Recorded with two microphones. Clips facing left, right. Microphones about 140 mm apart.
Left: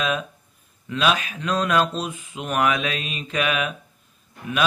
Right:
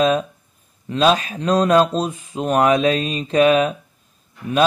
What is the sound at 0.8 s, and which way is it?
Speech, 35° right (ahead or behind).